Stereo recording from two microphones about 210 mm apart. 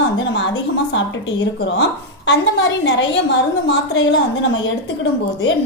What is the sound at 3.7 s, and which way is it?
A woman's voice, 60° left (ahead or behind).